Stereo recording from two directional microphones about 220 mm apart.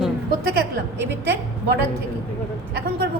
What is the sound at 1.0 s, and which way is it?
Speech, 50° right (ahead or behind).